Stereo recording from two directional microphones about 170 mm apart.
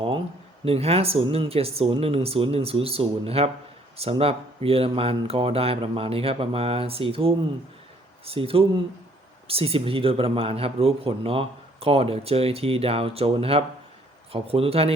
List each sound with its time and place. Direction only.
0.6 s speech: 35° right (ahead or behind)